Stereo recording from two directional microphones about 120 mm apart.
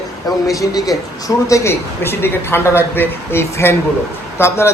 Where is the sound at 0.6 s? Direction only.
30° left (ahead or behind).